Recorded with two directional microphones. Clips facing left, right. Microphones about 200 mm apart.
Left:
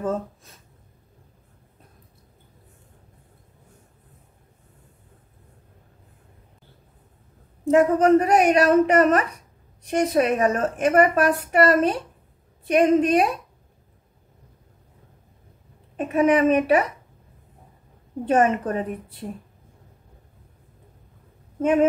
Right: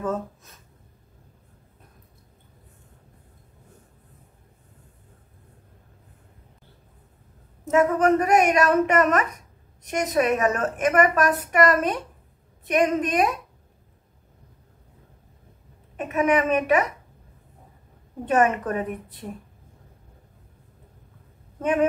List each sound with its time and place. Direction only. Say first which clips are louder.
0.0 s speech: left 1 dB; 30° left (ahead or behind)
7.6 s a woman's voice: left 3 dB; 30° left (ahead or behind)
16.0 s a woman's voice: left 3 dB; 30° left (ahead or behind)
18.2 s a woman's voice: left 1 dB; 30° left (ahead or behind)